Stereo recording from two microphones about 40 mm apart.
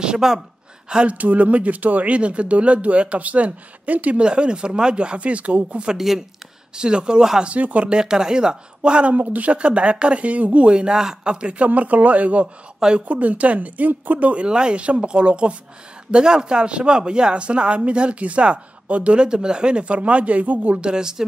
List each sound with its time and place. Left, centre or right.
0.0 s speech: right
1.0 s speech: right
4.2 s speech: right
5.9 s speech: centre
6.7 s speech: right
7.4 s speech: right
7.9 s speech: centre
9.1 s speech: right
10.7 s speech: right
14.3 s speech: right
19.1 s speech: centre; by 20.8 s right
20.8 s speech: centre